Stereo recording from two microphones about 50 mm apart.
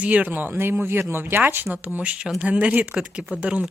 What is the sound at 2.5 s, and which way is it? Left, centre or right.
Speech, right.